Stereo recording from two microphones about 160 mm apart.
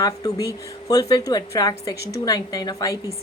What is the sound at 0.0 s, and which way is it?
A woman's voice, 20° left (ahead or behind).